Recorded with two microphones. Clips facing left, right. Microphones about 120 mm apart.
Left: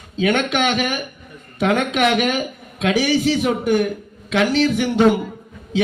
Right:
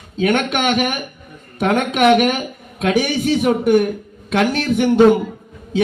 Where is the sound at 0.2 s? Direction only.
55° right (ahead or behind).